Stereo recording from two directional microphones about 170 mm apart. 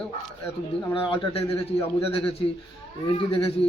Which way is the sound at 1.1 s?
35° left (ahead or behind).